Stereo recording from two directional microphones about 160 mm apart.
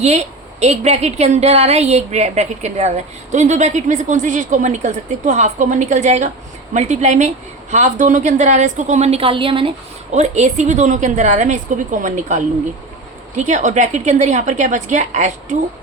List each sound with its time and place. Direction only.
0.0 s a woman's voice: 45° right (ahead or behind)
10.2 s a woman's voice: 50° right (ahead or behind)